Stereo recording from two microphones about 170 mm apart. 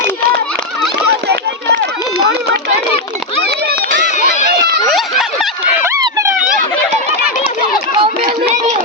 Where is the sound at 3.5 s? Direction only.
70° right (ahead or behind).